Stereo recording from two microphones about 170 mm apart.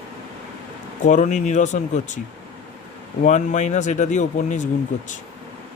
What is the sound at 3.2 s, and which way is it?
Speech, 45° left (ahead or behind).